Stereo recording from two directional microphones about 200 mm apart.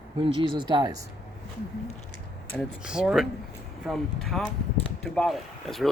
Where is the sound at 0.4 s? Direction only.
20° right (ahead or behind).